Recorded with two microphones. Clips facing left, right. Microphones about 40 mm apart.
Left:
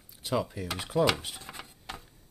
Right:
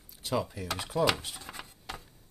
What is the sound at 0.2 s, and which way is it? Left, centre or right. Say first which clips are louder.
Speech: left 1 dB; centre.